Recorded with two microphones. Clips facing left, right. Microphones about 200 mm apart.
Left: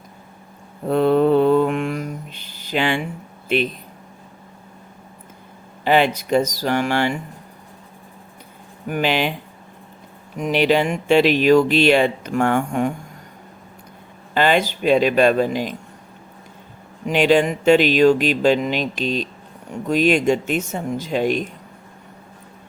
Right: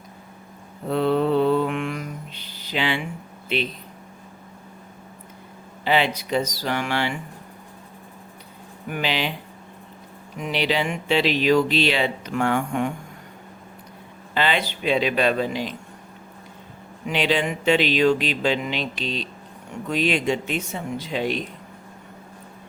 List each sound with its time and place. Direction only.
0.9 s mantra: 50° left (ahead or behind)
3.5 s speech: 50° left (ahead or behind)
5.8 s speech: 50° left (ahead or behind)
8.9 s speech: 50° left (ahead or behind)
10.3 s speech: 45° left (ahead or behind)
14.3 s speech: 45° left (ahead or behind)
17.1 s speech: 45° left (ahead or behind)